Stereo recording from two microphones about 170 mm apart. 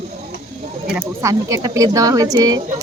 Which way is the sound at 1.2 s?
20° right (ahead or behind).